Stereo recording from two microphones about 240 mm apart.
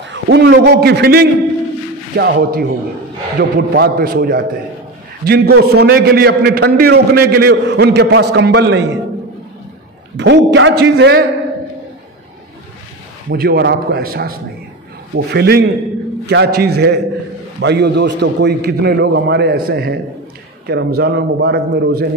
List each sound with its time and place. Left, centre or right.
0.0 s a man's voice: right
10.1 s a man's voice: right
13.3 s a man's voice: right